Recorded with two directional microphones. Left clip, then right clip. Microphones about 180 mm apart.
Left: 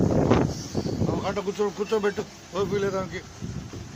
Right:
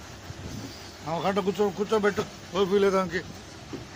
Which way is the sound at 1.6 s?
Centre (ahead or behind).